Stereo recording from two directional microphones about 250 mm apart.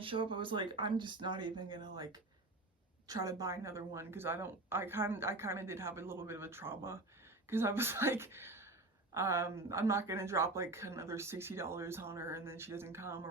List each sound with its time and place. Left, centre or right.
0.0 s speech: centre